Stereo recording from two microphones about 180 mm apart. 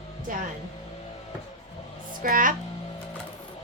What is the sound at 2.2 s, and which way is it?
Speech, 50° right (ahead or behind).